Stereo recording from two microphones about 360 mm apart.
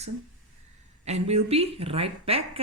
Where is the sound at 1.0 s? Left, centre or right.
Centre.